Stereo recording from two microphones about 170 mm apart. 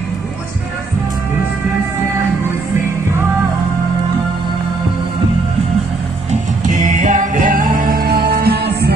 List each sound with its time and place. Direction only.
6.3 s music: 45° right (ahead or behind); by 8.9 s 70° right (ahead or behind)